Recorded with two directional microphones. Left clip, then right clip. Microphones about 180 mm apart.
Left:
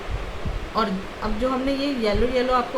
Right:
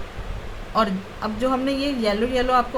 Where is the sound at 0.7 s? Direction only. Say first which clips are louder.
Right 3 dB; 25° right (ahead or behind).